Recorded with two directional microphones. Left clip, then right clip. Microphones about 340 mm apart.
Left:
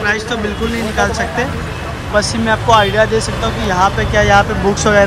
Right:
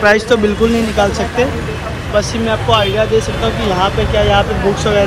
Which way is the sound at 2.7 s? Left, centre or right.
Centre.